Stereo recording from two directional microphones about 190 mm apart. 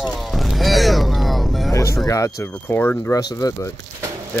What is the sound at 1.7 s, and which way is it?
Speech, 15° left (ahead or behind).